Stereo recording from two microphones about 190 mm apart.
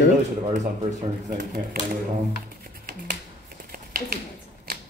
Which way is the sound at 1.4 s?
50° right (ahead or behind).